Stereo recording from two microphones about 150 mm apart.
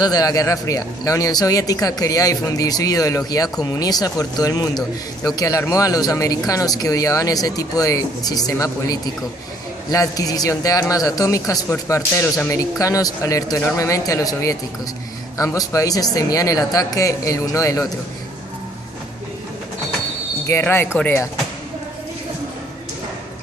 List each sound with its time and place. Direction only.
0.0 s speech: 25° left (ahead or behind)
20.5 s speech: 15° left (ahead or behind)